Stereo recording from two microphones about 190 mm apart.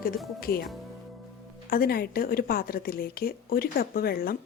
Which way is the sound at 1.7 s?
50° left (ahead or behind).